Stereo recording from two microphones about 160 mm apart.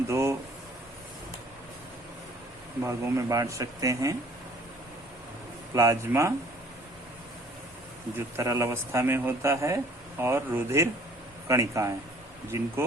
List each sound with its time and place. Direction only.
0.1 s a sound: 20° right (ahead or behind)
2.8 s speech: 15° right (ahead or behind)
5.7 s speech: 20° right (ahead or behind)
8.4 s speech: 20° right (ahead or behind)